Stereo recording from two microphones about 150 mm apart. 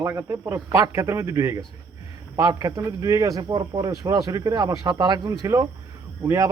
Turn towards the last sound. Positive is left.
turn(degrees=-20)  # may be behind; listen again after turning